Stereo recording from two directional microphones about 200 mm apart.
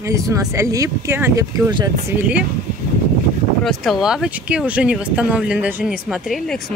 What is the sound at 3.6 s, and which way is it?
Speech, centre (ahead or behind).